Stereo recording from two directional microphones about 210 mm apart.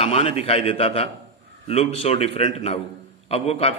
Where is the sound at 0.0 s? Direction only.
30° left (ahead or behind).